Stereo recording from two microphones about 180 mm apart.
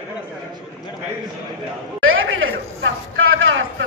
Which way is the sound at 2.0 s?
90° right.